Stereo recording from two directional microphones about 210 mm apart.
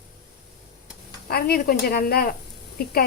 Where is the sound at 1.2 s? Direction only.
45° left (ahead or behind).